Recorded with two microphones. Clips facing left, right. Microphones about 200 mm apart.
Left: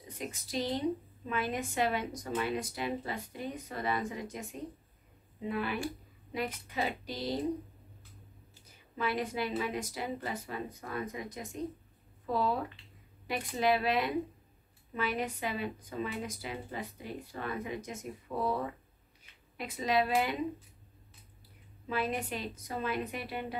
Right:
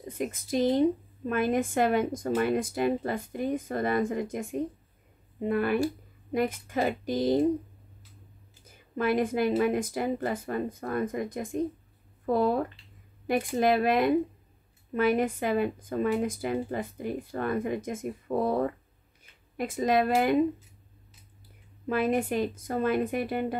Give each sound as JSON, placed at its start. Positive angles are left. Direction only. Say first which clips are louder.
{"t": 0.2, "sound": "a woman's voice", "louder": "right 9 dB", "side_deg": -50}
{"t": 8.7, "sound": "a woman's voice", "louder": "right 8 dB", "side_deg": -50}
{"t": 21.8, "sound": "a woman's voice", "louder": "right 8 dB", "side_deg": -50}